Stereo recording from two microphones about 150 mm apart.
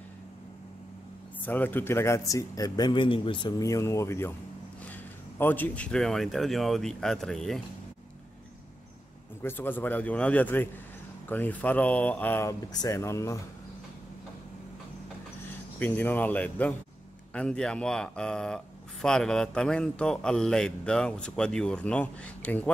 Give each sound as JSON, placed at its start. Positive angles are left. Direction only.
{"t": 1.4, "sound": "speech", "side_deg": 10}
{"t": 5.4, "sound": "speech", "side_deg": 10}
{"t": 9.4, "sound": "speech", "side_deg": 15}
{"t": 15.8, "sound": "speech", "side_deg": 15}